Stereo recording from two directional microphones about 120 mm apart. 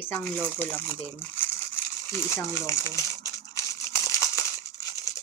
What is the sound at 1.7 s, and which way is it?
Crumpling, 20° left (ahead or behind).